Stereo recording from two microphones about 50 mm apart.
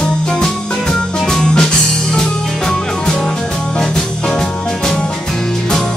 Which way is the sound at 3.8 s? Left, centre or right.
Centre.